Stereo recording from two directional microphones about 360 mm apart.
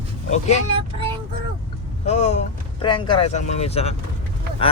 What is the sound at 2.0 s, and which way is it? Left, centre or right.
Speech, centre.